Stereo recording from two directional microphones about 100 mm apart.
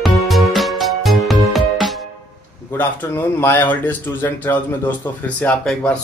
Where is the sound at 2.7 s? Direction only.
20° left (ahead or behind).